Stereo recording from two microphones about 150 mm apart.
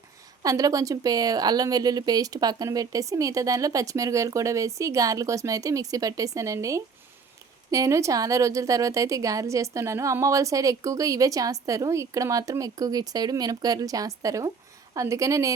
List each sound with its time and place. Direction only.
0.4 s a woman's voice: 20° right (ahead or behind)